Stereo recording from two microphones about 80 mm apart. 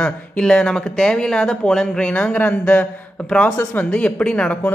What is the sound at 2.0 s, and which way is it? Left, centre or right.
Speech, centre.